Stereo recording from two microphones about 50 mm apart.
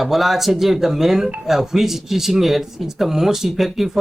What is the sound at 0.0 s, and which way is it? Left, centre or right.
Speech, centre.